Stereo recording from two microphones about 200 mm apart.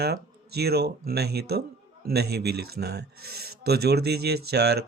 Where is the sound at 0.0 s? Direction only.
55° right (ahead or behind).